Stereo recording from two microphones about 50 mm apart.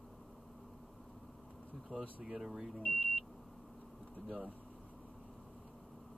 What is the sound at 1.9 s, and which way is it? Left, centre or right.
Speech, centre.